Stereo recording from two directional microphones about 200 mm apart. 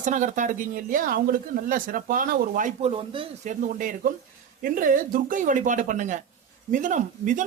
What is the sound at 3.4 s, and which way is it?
Speech, 40° right (ahead or behind).